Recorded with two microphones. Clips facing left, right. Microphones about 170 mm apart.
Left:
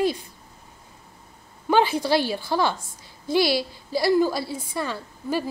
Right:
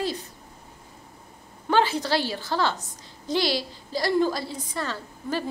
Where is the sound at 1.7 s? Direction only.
15° left (ahead or behind).